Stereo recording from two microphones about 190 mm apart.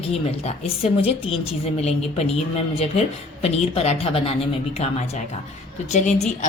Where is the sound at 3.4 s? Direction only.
30° left (ahead or behind).